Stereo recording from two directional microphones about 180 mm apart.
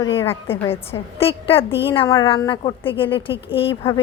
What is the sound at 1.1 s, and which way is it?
A woman's voice, 30° left (ahead or behind).